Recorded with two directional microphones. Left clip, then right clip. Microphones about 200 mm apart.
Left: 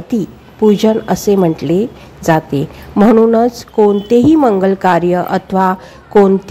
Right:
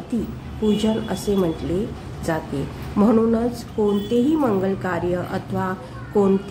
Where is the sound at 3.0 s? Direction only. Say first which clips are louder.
Left 10 dB; 40° left (ahead or behind).